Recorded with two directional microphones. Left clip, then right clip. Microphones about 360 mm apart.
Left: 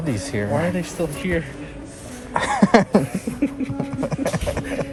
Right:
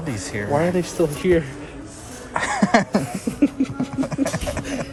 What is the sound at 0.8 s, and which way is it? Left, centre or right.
Speech, right.